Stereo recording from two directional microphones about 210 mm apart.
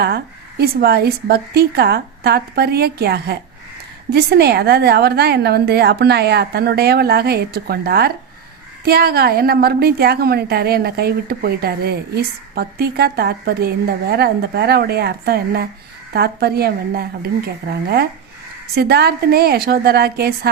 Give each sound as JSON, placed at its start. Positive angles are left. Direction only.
{"t": 0.0, "sound": "a woman's voice", "side_deg": -50}